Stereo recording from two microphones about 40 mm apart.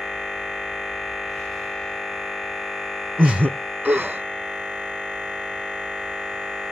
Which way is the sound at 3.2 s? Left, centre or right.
Right.